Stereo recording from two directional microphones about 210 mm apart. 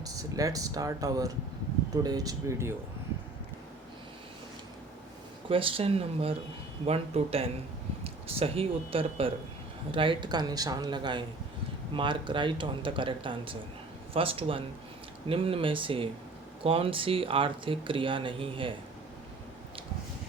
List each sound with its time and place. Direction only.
0.0 s speech: 15° right (ahead or behind)
5.5 s speech: 25° right (ahead or behind)